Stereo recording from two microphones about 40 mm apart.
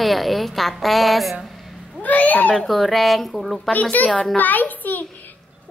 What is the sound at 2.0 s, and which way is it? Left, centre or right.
Speech, left.